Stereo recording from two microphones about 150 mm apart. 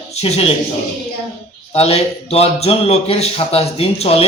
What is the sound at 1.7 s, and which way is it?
A man's voice, 45° left (ahead or behind).